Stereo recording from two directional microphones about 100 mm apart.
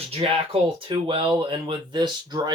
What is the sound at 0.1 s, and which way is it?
Speech, 70° right (ahead or behind).